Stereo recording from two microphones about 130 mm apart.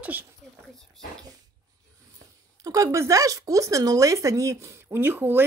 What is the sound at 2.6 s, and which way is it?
Speech, 25° right (ahead or behind).